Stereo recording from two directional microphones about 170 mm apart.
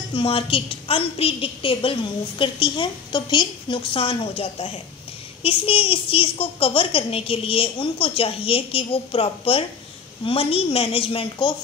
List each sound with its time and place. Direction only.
0.1 s a woman's voice: 30° left (ahead or behind)